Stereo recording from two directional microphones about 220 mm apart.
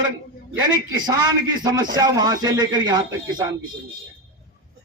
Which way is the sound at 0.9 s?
20° right (ahead or behind).